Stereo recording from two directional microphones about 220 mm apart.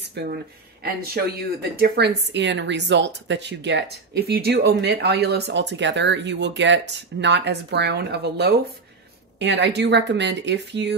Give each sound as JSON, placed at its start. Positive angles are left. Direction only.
{"t": 0.1, "sound": "a woman's voice", "side_deg": -45}